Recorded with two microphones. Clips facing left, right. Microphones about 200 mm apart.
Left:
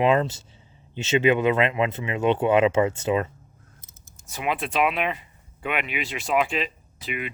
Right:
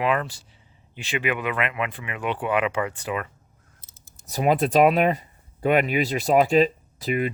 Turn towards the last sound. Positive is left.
turn(degrees=-40)  # may be behind; listen again after turning